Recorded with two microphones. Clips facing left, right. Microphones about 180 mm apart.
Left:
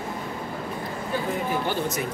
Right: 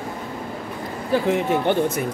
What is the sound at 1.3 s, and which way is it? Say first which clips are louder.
Speech: right 7 dB; 80° right.